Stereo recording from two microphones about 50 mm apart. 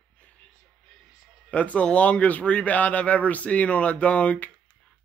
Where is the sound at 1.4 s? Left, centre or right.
Left.